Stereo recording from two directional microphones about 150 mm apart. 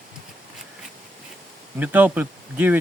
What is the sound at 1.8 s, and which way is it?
Speech, 10° right (ahead or behind).